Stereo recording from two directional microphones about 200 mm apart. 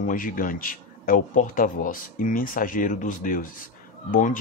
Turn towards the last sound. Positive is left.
turn(degrees=40)  # may be behind; listen again after turning